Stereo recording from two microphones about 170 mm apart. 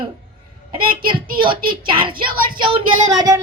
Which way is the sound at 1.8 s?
30° right (ahead or behind).